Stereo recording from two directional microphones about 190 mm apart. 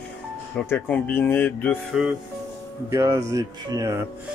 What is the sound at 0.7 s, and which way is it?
Speech, 10° left (ahead or behind).